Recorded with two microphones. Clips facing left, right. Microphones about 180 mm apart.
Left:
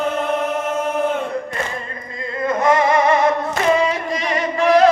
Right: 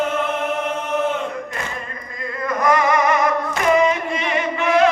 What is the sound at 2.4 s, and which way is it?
Music, 25° left (ahead or behind).